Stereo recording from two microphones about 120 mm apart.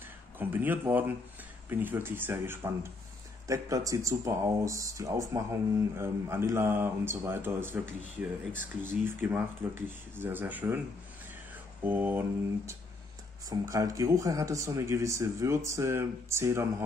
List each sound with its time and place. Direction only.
0.4 s speech: 15° right (ahead or behind)
11.8 s speech: 15° right (ahead or behind)
13.5 s speech: 30° right (ahead or behind)